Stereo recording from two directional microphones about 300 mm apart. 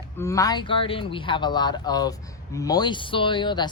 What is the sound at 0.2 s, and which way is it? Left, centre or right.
Speech, centre.